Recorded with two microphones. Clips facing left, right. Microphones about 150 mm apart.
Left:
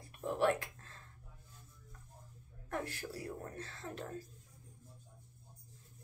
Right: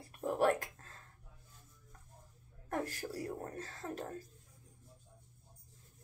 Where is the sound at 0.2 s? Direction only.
45° right (ahead or behind).